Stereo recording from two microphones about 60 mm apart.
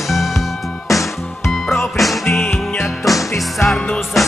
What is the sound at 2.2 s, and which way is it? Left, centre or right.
Music, left.